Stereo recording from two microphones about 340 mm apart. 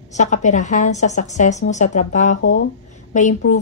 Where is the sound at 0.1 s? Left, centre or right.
Left.